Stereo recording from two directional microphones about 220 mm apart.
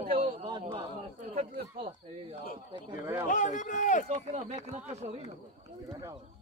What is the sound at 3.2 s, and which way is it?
Speech, 35° left (ahead or behind).